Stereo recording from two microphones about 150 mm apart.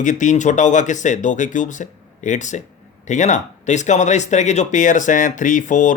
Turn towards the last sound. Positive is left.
turn(degrees=55)  # may be behind; listen again after turning